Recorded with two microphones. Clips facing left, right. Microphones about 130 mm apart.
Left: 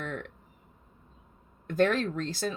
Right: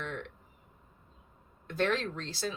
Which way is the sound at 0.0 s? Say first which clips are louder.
Left 3 dB; 45° left (ahead or behind).